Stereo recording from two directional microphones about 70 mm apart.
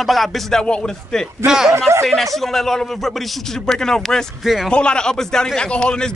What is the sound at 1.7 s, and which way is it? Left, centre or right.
Speech, right.